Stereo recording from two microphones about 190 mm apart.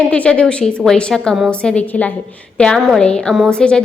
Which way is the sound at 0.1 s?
5° left (ahead or behind).